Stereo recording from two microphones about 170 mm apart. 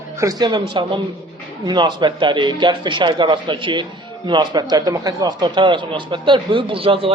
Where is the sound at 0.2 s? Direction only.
20° right (ahead or behind).